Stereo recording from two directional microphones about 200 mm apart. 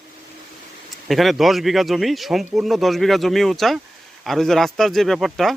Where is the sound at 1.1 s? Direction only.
Centre (ahead or behind).